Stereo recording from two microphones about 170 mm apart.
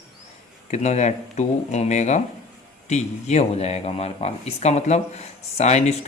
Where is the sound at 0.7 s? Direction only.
40° left (ahead or behind).